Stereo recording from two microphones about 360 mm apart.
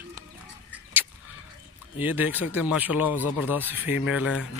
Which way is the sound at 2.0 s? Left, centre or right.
Centre.